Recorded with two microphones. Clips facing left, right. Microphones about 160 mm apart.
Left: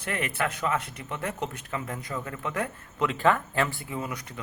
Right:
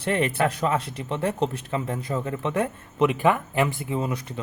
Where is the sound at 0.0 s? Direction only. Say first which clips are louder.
Right 7 dB; 25° right (ahead or behind).